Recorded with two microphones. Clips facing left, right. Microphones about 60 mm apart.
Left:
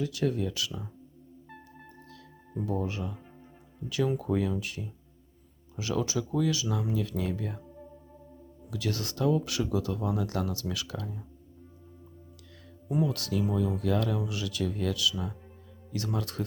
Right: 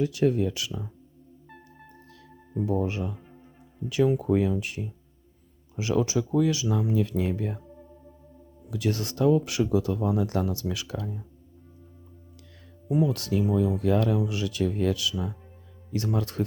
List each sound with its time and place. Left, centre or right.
0.0 s speech: right
1.5 s music: centre
2.6 s speech: right
8.7 s speech: right
12.9 s speech: centre
13.1 s speech: right
15.1 s speech: centre
16.1 s speech: right